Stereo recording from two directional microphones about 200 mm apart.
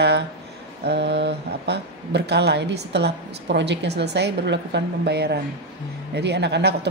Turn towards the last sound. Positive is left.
turn(degrees=-55)  # may be behind; listen again after turning